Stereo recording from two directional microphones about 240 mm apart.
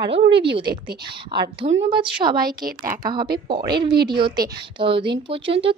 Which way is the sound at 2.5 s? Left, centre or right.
Right.